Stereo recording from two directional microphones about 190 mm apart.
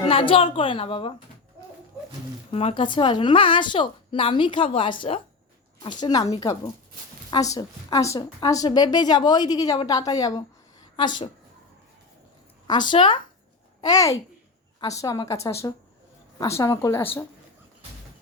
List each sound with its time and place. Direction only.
0.1 s a woman's voice: 30° left (ahead or behind)
2.5 s a woman's voice: 30° left (ahead or behind)
12.6 s a woman's voice: 25° left (ahead or behind)